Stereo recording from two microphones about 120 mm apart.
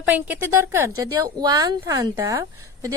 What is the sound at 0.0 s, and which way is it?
Speech, 15° right (ahead or behind).